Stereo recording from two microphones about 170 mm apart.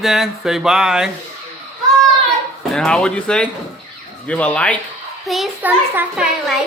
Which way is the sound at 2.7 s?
5° left (ahead or behind).